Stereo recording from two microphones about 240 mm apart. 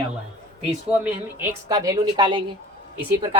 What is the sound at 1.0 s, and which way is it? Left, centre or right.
A woman's voice, centre.